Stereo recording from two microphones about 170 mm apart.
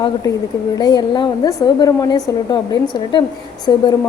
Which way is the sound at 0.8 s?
25° left (ahead or behind).